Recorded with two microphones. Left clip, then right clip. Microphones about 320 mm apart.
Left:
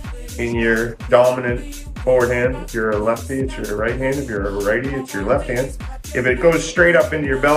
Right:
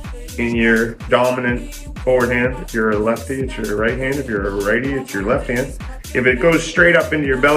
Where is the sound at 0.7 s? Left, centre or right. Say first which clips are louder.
Right 1 dB; centre.